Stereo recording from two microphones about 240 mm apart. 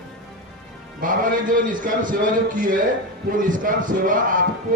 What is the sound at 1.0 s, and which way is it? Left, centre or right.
Speech, right.